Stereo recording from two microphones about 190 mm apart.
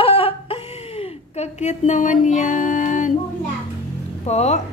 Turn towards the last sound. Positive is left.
turn(degrees=35)  # may be behind; listen again after turning